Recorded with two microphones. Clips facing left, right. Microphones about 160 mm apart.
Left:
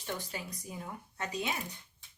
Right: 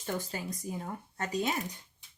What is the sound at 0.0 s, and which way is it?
Speech, 45° right (ahead or behind).